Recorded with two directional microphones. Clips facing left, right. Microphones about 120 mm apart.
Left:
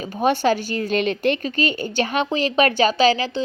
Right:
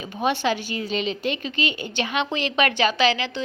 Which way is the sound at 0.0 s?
45° left (ahead or behind).